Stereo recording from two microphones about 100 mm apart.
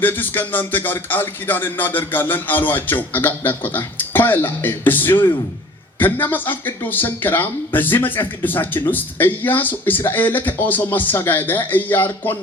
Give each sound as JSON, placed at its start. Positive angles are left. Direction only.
{"t": 0.0, "sound": "speech", "side_deg": 20}